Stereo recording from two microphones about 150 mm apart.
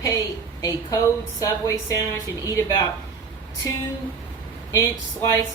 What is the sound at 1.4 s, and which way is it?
Speech, 20° left (ahead or behind).